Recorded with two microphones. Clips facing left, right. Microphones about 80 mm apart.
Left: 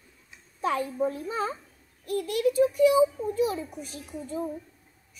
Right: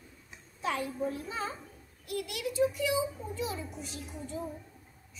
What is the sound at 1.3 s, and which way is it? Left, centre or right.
A child's voice, left.